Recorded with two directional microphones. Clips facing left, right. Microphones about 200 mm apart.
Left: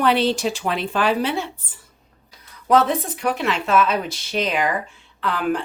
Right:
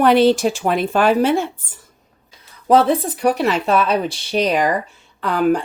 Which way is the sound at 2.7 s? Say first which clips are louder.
Right 4 dB; 30° right (ahead or behind).